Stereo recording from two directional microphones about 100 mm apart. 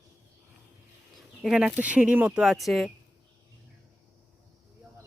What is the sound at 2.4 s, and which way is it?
Speech, centre (ahead or behind).